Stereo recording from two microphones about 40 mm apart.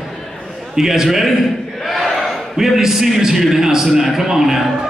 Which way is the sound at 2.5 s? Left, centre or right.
Centre.